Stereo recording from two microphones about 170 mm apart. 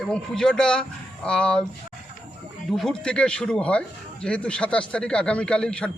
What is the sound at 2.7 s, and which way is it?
Speech, 5° left (ahead or behind).